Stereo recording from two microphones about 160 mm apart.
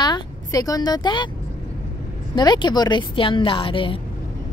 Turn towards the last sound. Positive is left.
turn(degrees=35)  # may be behind; listen again after turning